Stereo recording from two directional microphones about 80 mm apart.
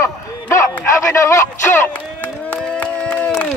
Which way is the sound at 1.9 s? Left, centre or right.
Left.